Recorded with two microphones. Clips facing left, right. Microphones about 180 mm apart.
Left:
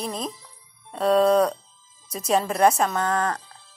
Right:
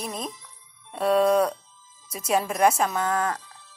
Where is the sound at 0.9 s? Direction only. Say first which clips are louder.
Left 2 dB; 5° right (ahead or behind).